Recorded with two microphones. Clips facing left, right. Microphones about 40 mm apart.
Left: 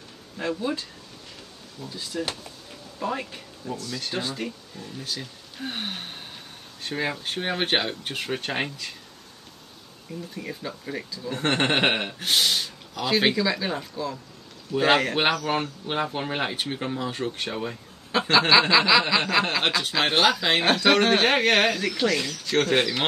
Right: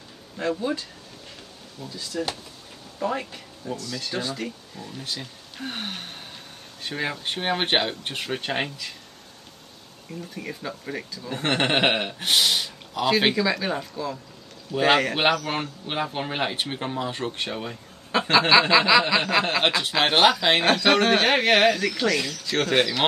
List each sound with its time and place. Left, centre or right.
0.4 s speech: centre
2.1 s speech: centre
4.7 s speech: centre
7.3 s speech: right
10.3 s speech: centre
12.2 s a sound: centre
13.2 s speech: centre
16.5 s speech: centre
17.5 s speech: centre
20.1 s speech: right
20.6 s speech: centre
22.8 s speech: centre